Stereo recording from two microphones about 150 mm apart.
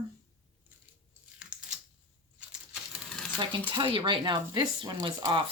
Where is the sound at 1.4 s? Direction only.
5° right (ahead or behind).